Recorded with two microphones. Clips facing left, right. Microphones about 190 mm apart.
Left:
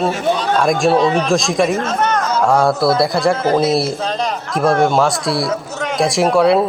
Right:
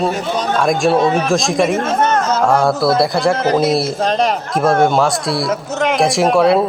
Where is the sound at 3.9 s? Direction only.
70° right (ahead or behind).